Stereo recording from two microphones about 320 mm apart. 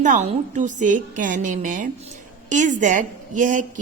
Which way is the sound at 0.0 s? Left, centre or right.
Right.